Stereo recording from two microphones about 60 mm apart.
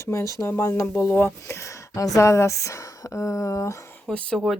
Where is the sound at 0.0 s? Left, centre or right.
Left.